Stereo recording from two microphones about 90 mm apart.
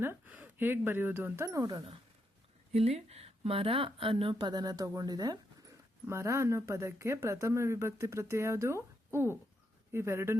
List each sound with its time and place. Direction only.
0.0 s speech: 25° right (ahead or behind)
1.5 s speech: 40° right (ahead or behind)
3.5 s speech: 90° right; by 5.7 s 45° right (ahead or behind)
6.1 s speech: 30° right (ahead or behind)
9.9 s speech: 30° right (ahead or behind)